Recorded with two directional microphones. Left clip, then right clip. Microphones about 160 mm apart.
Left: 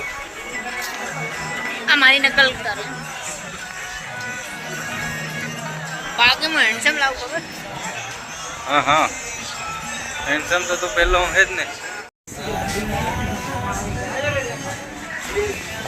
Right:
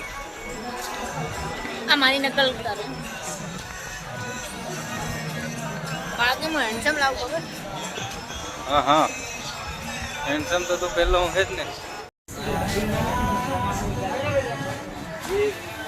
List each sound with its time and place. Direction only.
1.9 s a woman's voice: 30° right (ahead or behind)
6.1 s speech: 65° right (ahead or behind); by 7.1 s 40° right (ahead or behind)
8.7 s speech: 15° right (ahead or behind)
10.2 s a man's voice: 5° right (ahead or behind)